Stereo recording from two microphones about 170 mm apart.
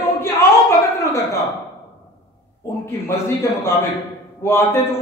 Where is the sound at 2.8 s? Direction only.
15° left (ahead or behind).